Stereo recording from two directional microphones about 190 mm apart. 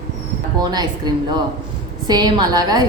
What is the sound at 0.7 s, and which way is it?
A woman's voice, 20° right (ahead or behind).